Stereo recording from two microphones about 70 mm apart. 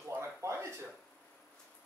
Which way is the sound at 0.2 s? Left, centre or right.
Right.